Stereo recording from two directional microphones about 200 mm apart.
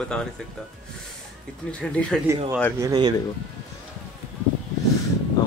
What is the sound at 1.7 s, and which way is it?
Speech, 5° left (ahead or behind).